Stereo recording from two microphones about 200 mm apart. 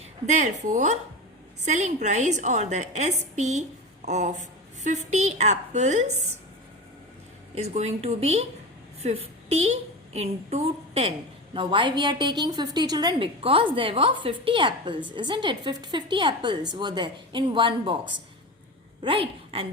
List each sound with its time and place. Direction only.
0.3 s a woman's voice: 35° right (ahead or behind)
7.5 s a woman's voice: 30° right (ahead or behind)